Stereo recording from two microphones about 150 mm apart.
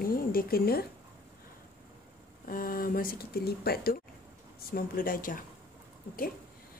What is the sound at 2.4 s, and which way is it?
Speech, 70° left (ahead or behind).